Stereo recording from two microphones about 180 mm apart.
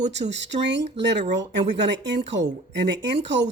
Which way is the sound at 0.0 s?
75° right (ahead or behind).